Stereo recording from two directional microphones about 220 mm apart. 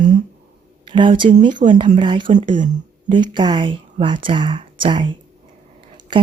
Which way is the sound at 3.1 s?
20° right (ahead or behind).